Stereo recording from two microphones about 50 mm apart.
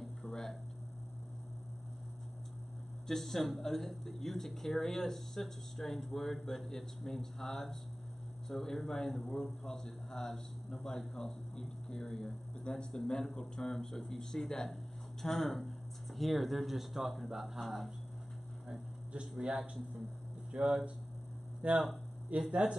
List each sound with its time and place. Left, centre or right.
0.0 s a sound: centre
3.1 s speech: centre
19.1 s speech: centre
20.6 s speech: centre